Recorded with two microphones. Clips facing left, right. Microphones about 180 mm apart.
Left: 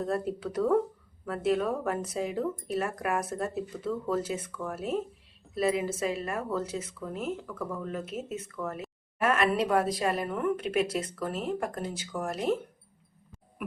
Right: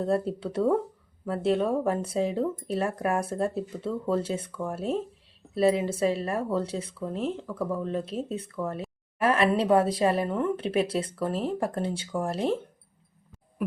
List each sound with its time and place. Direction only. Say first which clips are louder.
0.0 s speech: right 4 dB; 30° right (ahead or behind)